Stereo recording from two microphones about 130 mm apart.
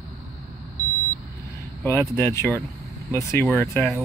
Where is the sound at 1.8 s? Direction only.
20° left (ahead or behind).